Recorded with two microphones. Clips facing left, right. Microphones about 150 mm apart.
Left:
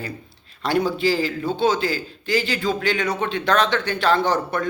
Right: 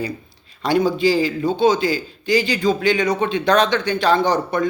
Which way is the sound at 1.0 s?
15° right (ahead or behind).